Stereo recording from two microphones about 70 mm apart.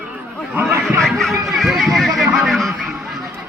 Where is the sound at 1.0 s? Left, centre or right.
Centre.